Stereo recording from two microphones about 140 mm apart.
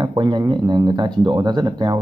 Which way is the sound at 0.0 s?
30° right (ahead or behind).